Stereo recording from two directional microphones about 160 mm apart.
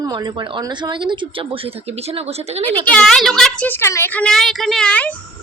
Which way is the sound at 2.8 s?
5° left (ahead or behind).